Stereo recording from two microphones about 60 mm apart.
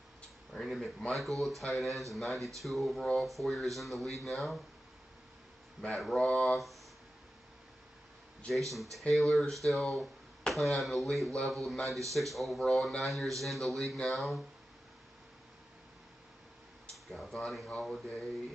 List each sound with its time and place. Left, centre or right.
0.5 s speech: centre
6.1 s speech: centre
8.5 s speech: centre
16.9 s speech: centre